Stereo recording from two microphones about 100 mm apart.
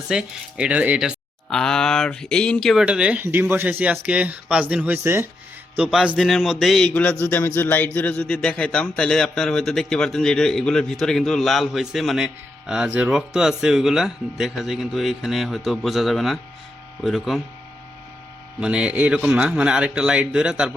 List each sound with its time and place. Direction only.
0.1 s a man's voice: 10° right (ahead or behind)
1.5 s speech: 5° left (ahead or behind)
2.8 s a man's voice: 10° right (ahead or behind)
5.7 s speech: 10° right (ahead or behind)
6.9 s speech: 15° left (ahead or behind)
18.6 s a man's voice: 10° right (ahead or behind)